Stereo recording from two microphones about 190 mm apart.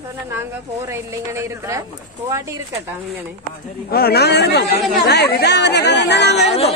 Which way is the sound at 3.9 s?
55° left (ahead or behind).